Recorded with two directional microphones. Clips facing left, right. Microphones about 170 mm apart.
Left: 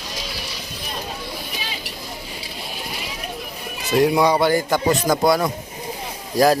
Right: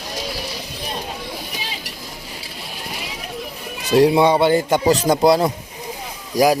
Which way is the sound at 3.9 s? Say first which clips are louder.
Right 3 dB; 30° right (ahead or behind).